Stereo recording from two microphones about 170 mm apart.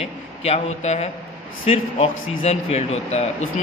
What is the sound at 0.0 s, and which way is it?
A man's voice, 40° left (ahead or behind).